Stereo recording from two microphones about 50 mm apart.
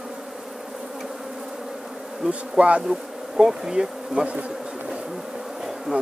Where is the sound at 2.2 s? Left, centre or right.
Centre.